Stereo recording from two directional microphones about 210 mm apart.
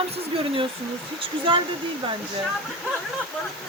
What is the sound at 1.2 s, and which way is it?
Speech, 25° right (ahead or behind).